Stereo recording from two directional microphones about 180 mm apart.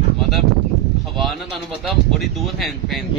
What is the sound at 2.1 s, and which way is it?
Speech, centre (ahead or behind).